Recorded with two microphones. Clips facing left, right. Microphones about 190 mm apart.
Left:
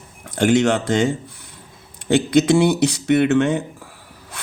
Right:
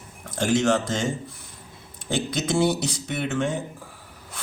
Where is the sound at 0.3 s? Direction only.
70° left (ahead or behind).